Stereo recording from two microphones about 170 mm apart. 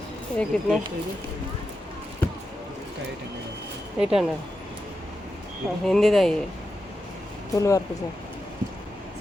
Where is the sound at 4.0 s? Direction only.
5° right (ahead or behind).